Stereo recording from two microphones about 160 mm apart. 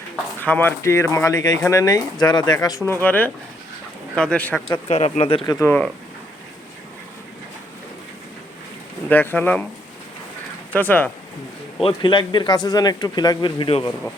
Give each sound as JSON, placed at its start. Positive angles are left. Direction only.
{"t": 0.4, "sound": "speech", "side_deg": 10}
{"t": 4.9, "sound": "speech", "side_deg": 40}
{"t": 5.5, "sound": "speech", "side_deg": 15}
{"t": 9.0, "sound": "speech", "side_deg": 10}
{"t": 10.7, "sound": "speech", "side_deg": 10}
{"t": 11.8, "sound": "speech", "side_deg": 30}